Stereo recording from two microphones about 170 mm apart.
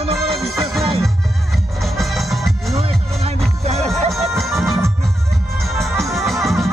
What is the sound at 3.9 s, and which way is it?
Music, centre (ahead or behind).